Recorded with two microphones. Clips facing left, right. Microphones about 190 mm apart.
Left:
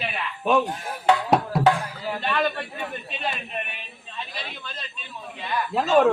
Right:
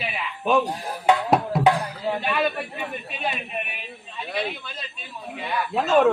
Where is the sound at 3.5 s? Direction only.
5° right (ahead or behind).